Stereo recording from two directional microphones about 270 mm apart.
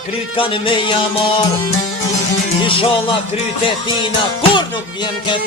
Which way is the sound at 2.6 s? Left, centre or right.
Centre.